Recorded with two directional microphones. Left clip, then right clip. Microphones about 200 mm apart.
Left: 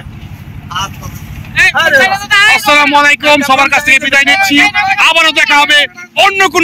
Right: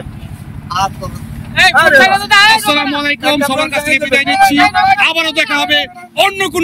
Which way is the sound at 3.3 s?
5° right (ahead or behind).